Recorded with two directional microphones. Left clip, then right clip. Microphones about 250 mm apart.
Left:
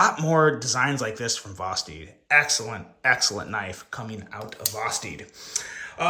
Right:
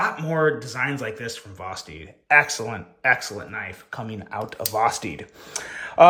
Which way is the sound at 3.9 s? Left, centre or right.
Centre.